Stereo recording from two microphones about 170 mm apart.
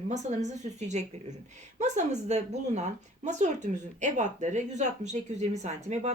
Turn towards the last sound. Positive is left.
turn(degrees=-45)  # may be behind; listen again after turning